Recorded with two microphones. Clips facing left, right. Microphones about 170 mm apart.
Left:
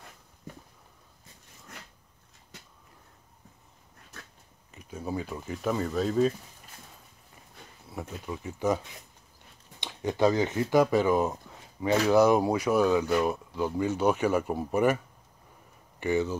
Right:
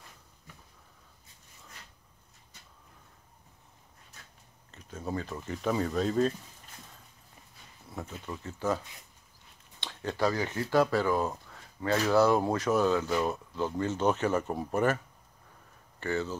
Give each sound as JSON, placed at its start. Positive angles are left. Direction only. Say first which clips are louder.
{"t": 4.6, "sound": "speech", "louder": "left 2 dB", "side_deg": 10}
{"t": 7.9, "sound": "speech", "louder": "left 3 dB", "side_deg": 10}
{"t": 16.0, "sound": "speech", "louder": "left 5 dB", "side_deg": 15}